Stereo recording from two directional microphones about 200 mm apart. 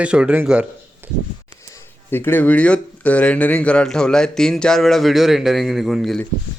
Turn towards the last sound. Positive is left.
turn(degrees=0)  # may be behind; listen again after turning